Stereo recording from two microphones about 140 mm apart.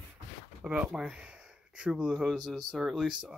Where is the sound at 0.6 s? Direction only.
5° right (ahead or behind).